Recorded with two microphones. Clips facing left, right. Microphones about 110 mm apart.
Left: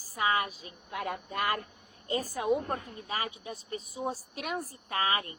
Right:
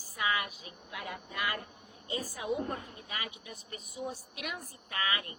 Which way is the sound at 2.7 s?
35° left (ahead or behind).